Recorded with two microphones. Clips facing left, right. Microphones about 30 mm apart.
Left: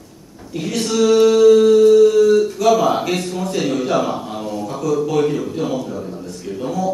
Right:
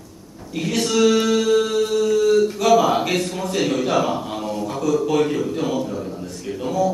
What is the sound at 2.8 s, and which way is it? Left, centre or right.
Speech, centre.